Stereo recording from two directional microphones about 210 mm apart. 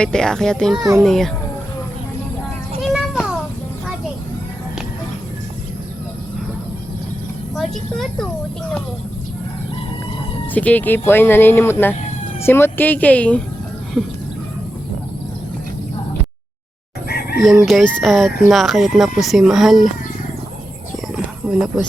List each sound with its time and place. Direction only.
0.0 s speech: 5° left (ahead or behind)
0.8 s a child's voice: 15° right (ahead or behind)
1.0 s speech: centre (ahead or behind)
2.8 s a sound: centre (ahead or behind)
7.5 s speech: centre (ahead or behind)
10.5 s speech: 5° left (ahead or behind)
17.1 s chicken: 50° left (ahead or behind)
17.4 s speech: centre (ahead or behind)
21.4 s speech: 5° right (ahead or behind)